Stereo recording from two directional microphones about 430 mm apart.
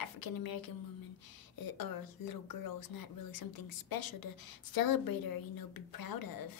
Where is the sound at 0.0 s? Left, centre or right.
Left.